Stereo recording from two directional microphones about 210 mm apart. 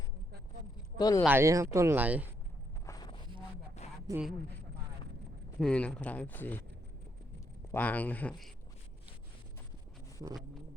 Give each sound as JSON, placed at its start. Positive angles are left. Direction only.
{"t": 0.9, "sound": "speech", "side_deg": 20}
{"t": 1.2, "sound": "speech", "side_deg": -10}
{"t": 2.8, "sound": "a sound", "side_deg": 15}
{"t": 3.8, "sound": "a sound", "side_deg": 30}
{"t": 5.5, "sound": "speech", "side_deg": 5}
{"t": 7.7, "sound": "speech", "side_deg": 10}